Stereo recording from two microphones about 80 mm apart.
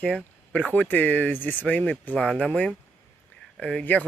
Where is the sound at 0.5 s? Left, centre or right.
Centre.